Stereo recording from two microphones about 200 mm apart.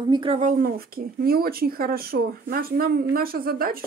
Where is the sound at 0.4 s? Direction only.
40° right (ahead or behind).